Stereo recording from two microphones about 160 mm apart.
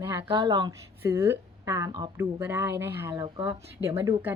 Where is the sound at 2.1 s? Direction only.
15° right (ahead or behind).